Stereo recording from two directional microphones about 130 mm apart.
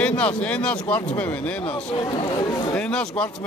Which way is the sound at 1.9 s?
40° left (ahead or behind).